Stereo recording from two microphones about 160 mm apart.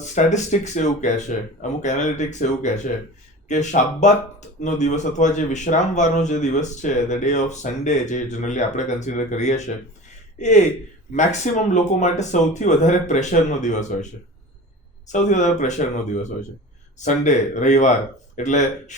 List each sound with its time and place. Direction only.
0.0 s speech: 45° left (ahead or behind)